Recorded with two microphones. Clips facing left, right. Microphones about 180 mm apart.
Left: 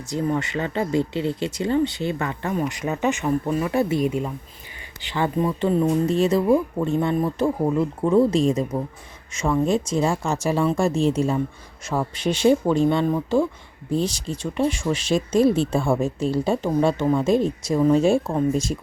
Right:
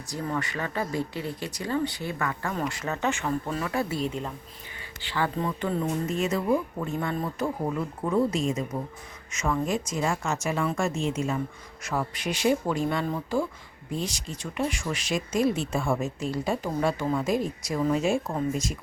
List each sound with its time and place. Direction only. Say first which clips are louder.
0.1 s speech: left 7 dB; 25° left (ahead or behind)
6.1 s a woman's voice: left 5 dB; 30° left (ahead or behind)